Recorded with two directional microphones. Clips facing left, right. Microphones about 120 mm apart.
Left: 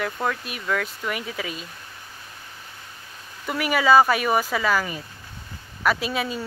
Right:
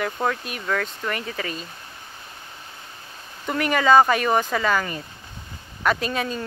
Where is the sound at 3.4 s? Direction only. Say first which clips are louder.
Right 1 dB; 5° left (ahead or behind).